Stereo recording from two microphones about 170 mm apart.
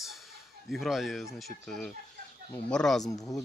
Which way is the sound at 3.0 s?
20° left (ahead or behind).